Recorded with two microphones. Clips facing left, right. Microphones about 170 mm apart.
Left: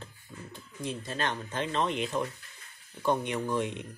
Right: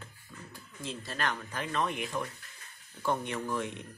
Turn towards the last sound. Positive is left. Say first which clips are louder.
# left 4 dB
turn(degrees=20)  # may be behind; listen again after turning